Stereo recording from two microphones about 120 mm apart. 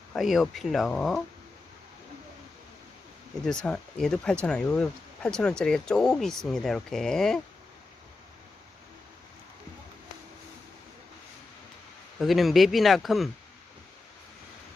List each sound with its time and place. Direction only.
0.2 s speech: centre (ahead or behind)
3.4 s speech: 5° left (ahead or behind)
12.2 s speech: centre (ahead or behind)